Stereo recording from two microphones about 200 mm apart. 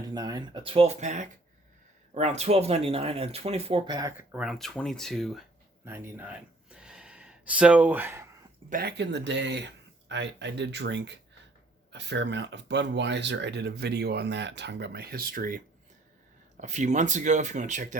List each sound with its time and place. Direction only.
0.1 s speech: 20° right (ahead or behind)
4.3 s speech: 5° right (ahead or behind)
5.8 s a sound: 10° right (ahead or behind)
8.7 s speech: 50° right (ahead or behind)